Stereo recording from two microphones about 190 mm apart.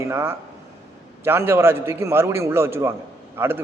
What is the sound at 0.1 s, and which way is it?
A man's voice, 15° right (ahead or behind).